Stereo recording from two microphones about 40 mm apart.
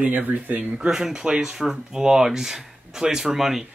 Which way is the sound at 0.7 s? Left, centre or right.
Centre.